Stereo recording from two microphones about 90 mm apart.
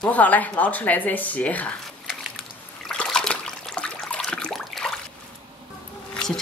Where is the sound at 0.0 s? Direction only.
20° left (ahead or behind).